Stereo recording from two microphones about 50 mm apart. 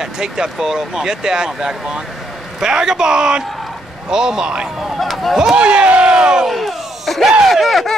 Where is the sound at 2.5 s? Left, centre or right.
Centre.